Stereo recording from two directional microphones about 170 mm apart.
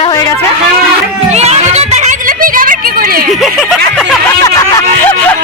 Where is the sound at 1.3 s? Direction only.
40° right (ahead or behind); by 3.2 s 60° right (ahead or behind).